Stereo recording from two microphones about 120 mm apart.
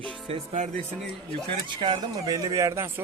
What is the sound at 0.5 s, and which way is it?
Speech, 90° right.